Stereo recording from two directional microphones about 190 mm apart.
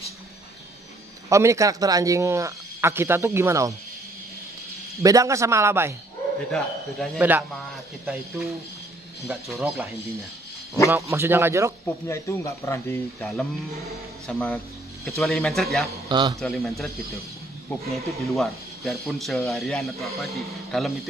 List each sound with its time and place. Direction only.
1.3 s speech: 15° right (ahead or behind)
4.9 s speech: 15° right (ahead or behind)
7.2 s speech: 10° right (ahead or behind)
10.9 s speech: 15° right (ahead or behind)
12.1 s speech: 15° left (ahead or behind)
13.2 s speech: centre (ahead or behind)
16.1 s a man's voice: 25° right (ahead or behind)
16.3 s speech: centre (ahead or behind)